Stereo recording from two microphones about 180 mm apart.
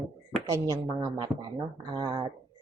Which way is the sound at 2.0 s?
25° right (ahead or behind).